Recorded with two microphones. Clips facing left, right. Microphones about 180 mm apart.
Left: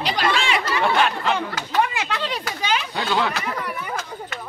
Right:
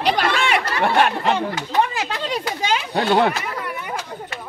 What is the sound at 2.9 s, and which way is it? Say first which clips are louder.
Speech: right 8 dB; 55° right (ahead or behind).